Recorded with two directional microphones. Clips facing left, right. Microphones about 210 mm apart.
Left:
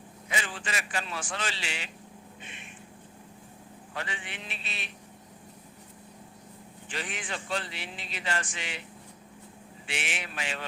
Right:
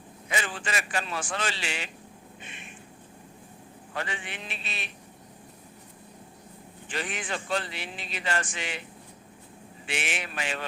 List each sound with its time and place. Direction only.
0.3 s a man's voice: 50° right (ahead or behind)
3.9 s speech: 50° right (ahead or behind)
6.9 s speech: 50° right (ahead or behind)
9.8 s speech: 50° right (ahead or behind)